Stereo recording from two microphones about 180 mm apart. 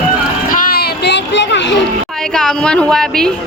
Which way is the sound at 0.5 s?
60° left (ahead or behind).